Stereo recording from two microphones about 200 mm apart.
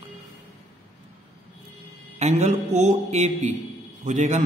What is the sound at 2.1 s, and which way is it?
A man's voice, 35° right (ahead or behind).